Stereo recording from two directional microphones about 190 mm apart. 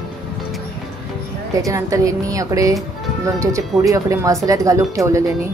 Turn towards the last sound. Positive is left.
turn(degrees=-15)  # may be behind; listen again after turning